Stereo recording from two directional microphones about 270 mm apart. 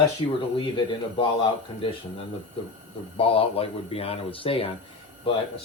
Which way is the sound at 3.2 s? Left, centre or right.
Left.